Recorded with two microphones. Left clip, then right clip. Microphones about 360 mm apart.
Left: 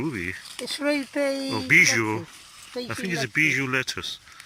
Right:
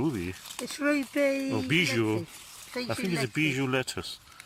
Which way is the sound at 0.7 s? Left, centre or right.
Centre.